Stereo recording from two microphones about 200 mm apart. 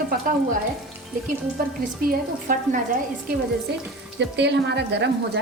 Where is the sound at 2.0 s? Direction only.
45° right (ahead or behind).